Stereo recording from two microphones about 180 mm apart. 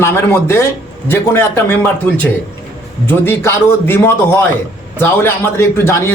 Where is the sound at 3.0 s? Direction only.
15° left (ahead or behind).